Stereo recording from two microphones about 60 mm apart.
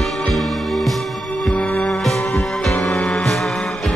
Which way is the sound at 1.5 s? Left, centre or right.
Left.